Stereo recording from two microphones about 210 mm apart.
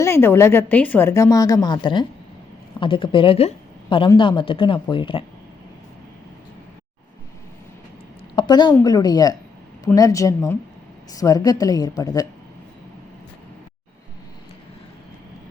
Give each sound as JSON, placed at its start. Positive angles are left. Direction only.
{"t": 0.0, "sound": "a woman's voice", "side_deg": 10}
{"t": 8.4, "sound": "a woman's voice", "side_deg": 20}